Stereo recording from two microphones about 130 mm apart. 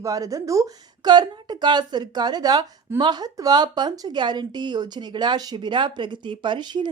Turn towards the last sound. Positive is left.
turn(degrees=-35)  # may be behind; listen again after turning